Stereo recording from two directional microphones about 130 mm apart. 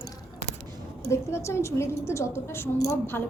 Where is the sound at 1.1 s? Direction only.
20° left (ahead or behind).